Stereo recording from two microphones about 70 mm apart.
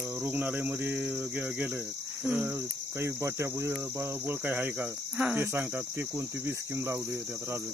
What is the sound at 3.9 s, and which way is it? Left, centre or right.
Cricket, right.